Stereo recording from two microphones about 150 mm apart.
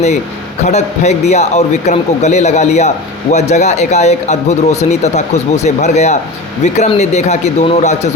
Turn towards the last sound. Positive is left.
turn(degrees=50)  # may be behind; listen again after turning